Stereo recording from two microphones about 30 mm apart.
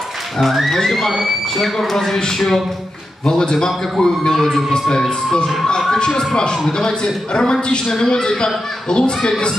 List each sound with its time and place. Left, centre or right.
0.4 s speech: centre
3.3 s a man's voice: left
4.4 s speech: centre
5.9 s a man's voice: left